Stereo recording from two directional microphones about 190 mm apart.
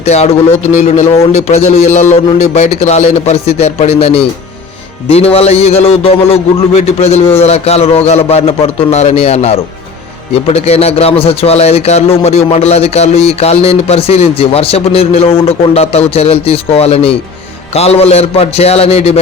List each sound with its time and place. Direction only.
0.0 s a man's voice: 35° left (ahead or behind)